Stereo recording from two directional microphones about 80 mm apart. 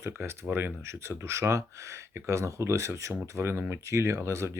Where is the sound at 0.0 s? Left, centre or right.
Right.